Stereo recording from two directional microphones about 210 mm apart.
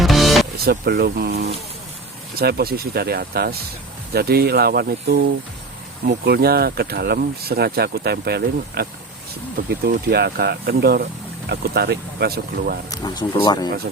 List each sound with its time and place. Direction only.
0.0 s music: centre (ahead or behind)
0.6 s speech: 50° right (ahead or behind)
12.9 s speech: 20° left (ahead or behind)